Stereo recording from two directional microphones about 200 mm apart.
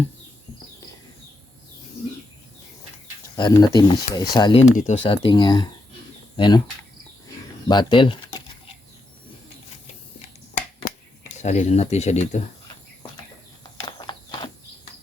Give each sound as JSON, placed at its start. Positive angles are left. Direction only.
{"t": 3.3, "sound": "speech", "side_deg": 20}
{"t": 4.8, "sound": "speech", "side_deg": 35}
{"t": 7.7, "sound": "speech", "side_deg": 25}
{"t": 10.8, "sound": "speech", "side_deg": 40}
{"t": 13.8, "sound": "a sound", "side_deg": 20}